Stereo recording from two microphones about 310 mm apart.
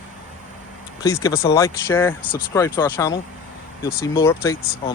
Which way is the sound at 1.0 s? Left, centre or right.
Centre.